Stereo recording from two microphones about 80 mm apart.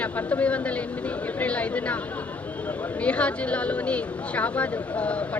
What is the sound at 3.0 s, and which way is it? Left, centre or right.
Speech, centre.